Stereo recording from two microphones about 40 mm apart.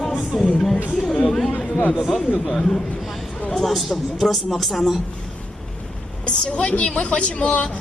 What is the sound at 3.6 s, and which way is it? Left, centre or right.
A man's voice, centre.